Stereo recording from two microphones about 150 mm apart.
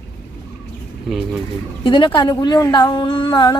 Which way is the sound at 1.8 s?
30° left (ahead or behind).